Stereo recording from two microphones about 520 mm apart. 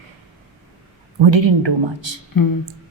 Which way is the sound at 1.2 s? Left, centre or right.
Right.